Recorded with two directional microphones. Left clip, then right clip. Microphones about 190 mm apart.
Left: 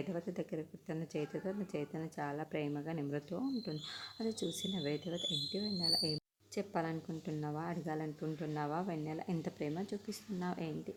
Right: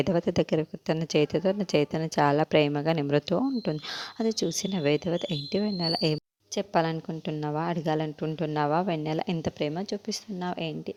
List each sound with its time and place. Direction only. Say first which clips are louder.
0.1 s a woman's voice: right 16 dB; 45° right (ahead or behind)
4.2 s a woman's voice: right 12 dB; 40° right (ahead or behind); by 6.1 s 55° right (ahead or behind)
6.6 s a woman's voice: right 12 dB; 45° right (ahead or behind)